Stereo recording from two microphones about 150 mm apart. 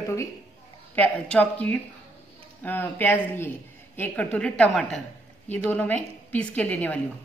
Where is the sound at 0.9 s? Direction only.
10° left (ahead or behind).